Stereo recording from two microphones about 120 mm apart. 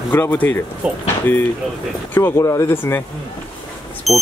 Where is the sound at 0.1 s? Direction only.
20° left (ahead or behind).